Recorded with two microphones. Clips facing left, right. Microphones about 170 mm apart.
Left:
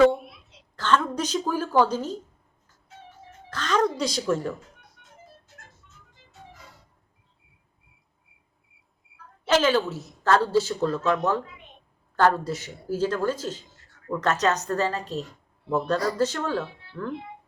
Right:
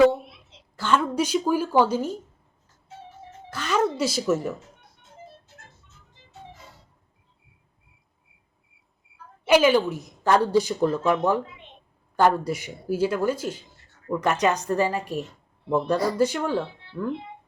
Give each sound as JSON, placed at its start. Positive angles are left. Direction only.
{"t": 0.8, "sound": "a woman's voice", "side_deg": -10}
{"t": 3.5, "sound": "a woman's voice", "side_deg": -10}
{"t": 5.0, "sound": "music", "side_deg": -30}
{"t": 9.0, "sound": "a sound", "side_deg": 0}
{"t": 9.4, "sound": "a woman's voice", "side_deg": -15}